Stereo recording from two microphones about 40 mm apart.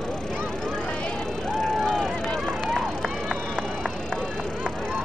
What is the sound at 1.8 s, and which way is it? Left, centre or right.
Vehicle, centre.